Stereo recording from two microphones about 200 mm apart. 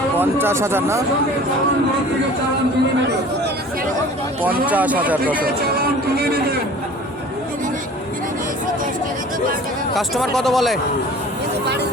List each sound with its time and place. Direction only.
0.2 s speech: 10° right (ahead or behind)
4.6 s speech: 10° right (ahead or behind)
5.7 s music: 50° right (ahead or behind)
9.9 s speech: centre (ahead or behind)